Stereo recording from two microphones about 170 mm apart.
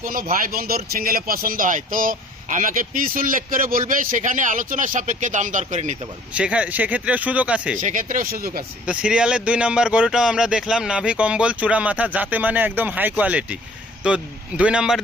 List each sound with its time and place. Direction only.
0.0 s speech: 55° right (ahead or behind)
6.3 s speech: 5° right (ahead or behind)
7.8 s speech: 50° right (ahead or behind)
8.9 s speech: 5° right (ahead or behind)